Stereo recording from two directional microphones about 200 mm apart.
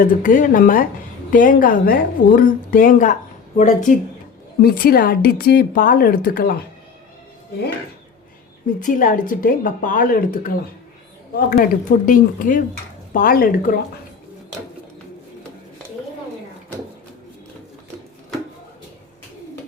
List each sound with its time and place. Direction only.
0.0 s a woman's voice: 45° left (ahead or behind)
8.8 s a woman's voice: 40° left (ahead or behind)